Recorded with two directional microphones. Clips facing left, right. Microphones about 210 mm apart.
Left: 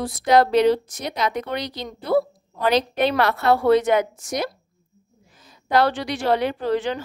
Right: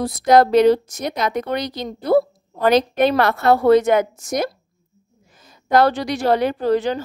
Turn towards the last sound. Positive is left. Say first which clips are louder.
# right 4 dB
turn(degrees=-40)  # may be behind; listen again after turning